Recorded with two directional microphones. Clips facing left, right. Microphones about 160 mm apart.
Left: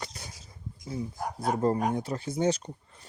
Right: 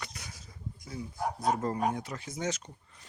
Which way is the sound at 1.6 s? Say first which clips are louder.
Left 5 dB; 30° left (ahead or behind).